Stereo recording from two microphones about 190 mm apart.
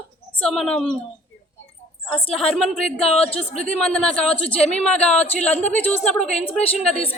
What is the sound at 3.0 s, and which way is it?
Speech, 30° left (ahead or behind).